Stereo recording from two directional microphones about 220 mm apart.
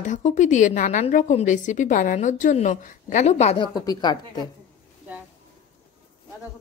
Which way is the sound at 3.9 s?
20° left (ahead or behind).